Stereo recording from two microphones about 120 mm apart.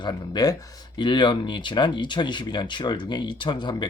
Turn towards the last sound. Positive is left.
turn(degrees=40)  # may be behind; listen again after turning